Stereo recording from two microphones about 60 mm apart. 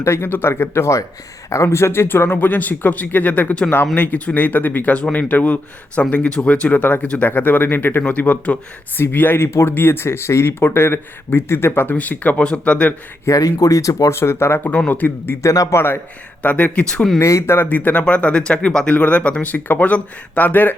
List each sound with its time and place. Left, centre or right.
0.0 s speech: left
1.5 s speech: left
8.0 s speech: left
9.0 s speech: left
11.9 s speech: left
13.2 s speech: left
14.2 s speech: left
14.6 s speech: left
15.4 s speech: left
15.7 s speech: left
16.4 s speech: left
17.2 s speech: left
17.4 s speech: left
17.7 s speech: left